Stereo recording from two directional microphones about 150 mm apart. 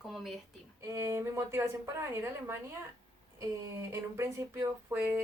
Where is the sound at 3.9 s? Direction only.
20° right (ahead or behind).